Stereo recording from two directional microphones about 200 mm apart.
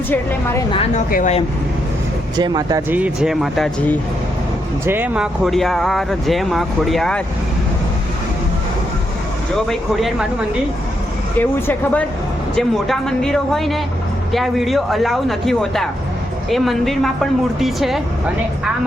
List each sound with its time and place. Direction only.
0.1 s speech: 10° left (ahead or behind)
0.7 s speech: 30° left (ahead or behind)
2.3 s speech: 20° right (ahead or behind)
2.9 s speech: 5° right (ahead or behind)
9.6 s speech: centre (ahead or behind)
11.3 s speech: 10° left (ahead or behind)